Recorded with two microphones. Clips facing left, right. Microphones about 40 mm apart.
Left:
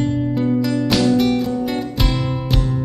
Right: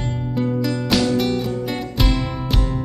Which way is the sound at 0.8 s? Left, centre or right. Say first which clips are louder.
Left 2 dB; centre.